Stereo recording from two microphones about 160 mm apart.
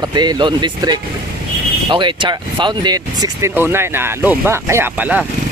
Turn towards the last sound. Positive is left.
turn(degrees=-10)  # may be behind; listen again after turning